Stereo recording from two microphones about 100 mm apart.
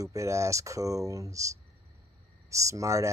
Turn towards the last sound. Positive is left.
turn(degrees=-30)  # may be behind; listen again after turning